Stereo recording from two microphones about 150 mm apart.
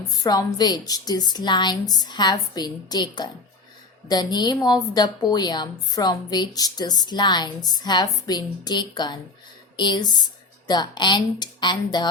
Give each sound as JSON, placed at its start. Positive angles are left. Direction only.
{"t": 0.1, "sound": "a woman's voice", "side_deg": 25}